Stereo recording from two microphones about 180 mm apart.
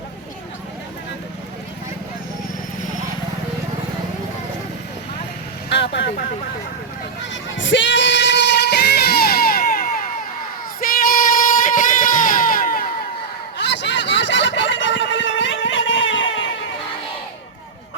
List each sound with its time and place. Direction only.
5.6 s vehicle: 75° left (ahead or behind)
7.5 s music: 85° left; by 10.1 s 50° left (ahead or behind)
10.8 s singing: 50° left (ahead or behind)
13.6 s a sound: 70° left (ahead or behind); by 16.2 s 90° left